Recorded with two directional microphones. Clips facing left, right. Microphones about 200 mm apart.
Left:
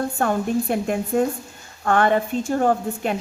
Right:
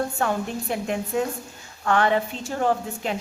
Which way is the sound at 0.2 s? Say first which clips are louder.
Left 5 dB; 50° left (ahead or behind).